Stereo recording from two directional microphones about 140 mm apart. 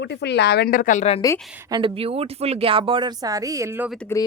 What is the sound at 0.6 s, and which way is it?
Speech, 90° left.